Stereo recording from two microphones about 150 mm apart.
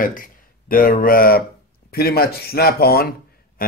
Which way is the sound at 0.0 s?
65° left (ahead or behind).